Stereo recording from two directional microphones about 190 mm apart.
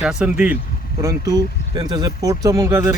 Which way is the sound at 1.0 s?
20° right (ahead or behind).